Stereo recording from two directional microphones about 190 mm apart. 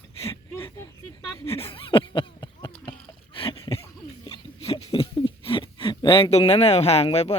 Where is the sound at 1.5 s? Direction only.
30° left (ahead or behind).